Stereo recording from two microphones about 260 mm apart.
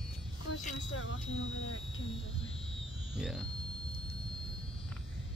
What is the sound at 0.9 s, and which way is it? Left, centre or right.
Speech, left.